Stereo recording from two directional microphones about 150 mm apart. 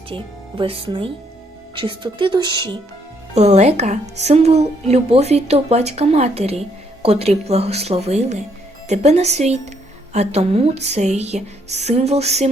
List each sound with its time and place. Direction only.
0.1 s speech: 35° right (ahead or behind)
3.3 s a woman's voice: 50° right (ahead or behind)